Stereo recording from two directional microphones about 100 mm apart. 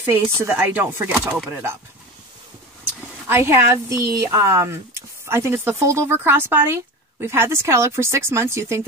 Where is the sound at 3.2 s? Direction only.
25° right (ahead or behind).